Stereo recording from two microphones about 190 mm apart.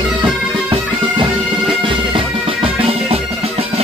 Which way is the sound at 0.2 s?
25° right (ahead or behind).